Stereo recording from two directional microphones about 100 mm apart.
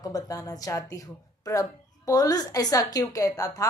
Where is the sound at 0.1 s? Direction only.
35° left (ahead or behind).